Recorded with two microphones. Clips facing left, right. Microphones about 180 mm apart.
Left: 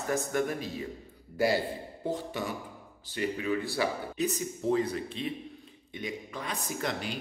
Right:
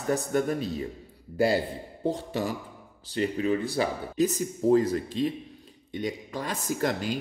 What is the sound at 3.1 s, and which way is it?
Speech, 30° right (ahead or behind).